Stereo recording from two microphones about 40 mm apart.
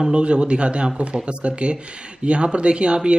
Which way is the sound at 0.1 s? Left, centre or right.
Right.